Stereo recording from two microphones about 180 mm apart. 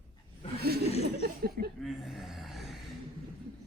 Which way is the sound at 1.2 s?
60° right (ahead or behind).